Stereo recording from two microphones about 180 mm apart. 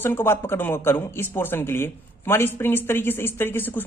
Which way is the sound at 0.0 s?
10° left (ahead or behind).